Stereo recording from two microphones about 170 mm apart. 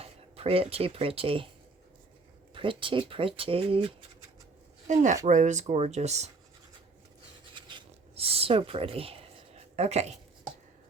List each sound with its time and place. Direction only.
0.0 s speech: 35° right (ahead or behind)
2.6 s speech: 30° right (ahead or behind)
4.9 s speech: 45° right (ahead or behind)
7.5 s writing: 30° right (ahead or behind)